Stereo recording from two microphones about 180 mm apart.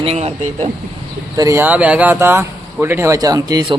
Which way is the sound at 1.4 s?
15° right (ahead or behind).